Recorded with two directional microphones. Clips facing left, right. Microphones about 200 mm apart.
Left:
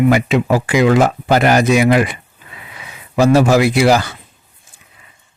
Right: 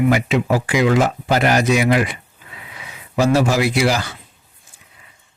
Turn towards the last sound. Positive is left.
turn(degrees=55)  # may be behind; listen again after turning